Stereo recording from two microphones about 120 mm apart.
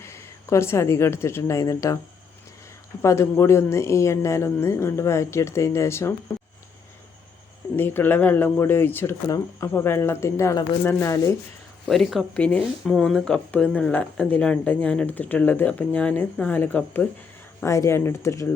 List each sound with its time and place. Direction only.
0.0 s speech: 25° left (ahead or behind)
3.0 s speech: 25° left (ahead or behind)
7.8 s speech: 15° left (ahead or behind)
11.9 s speech: centre (ahead or behind); by 18.4 s 25° left (ahead or behind)